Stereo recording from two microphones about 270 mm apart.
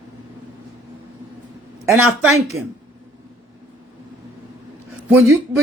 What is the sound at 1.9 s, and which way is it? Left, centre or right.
Speech, right.